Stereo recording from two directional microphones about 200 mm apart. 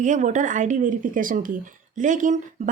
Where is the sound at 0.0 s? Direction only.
40° right (ahead or behind).